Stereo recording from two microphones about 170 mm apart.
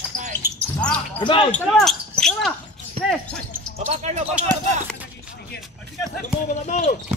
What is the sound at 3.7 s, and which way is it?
Speech, 40° right (ahead or behind).